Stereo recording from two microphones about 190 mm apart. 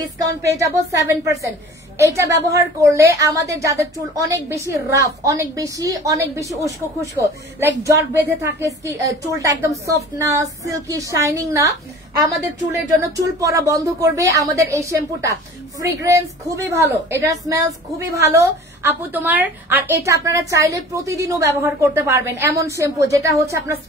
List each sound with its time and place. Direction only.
0.6 s a woman's voice: 15° right (ahead or behind)